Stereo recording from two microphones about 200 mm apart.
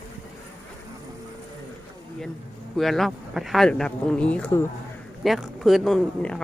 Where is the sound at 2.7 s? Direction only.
Centre (ahead or behind).